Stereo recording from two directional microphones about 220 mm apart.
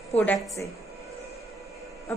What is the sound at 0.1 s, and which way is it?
Speech, 5° left (ahead or behind).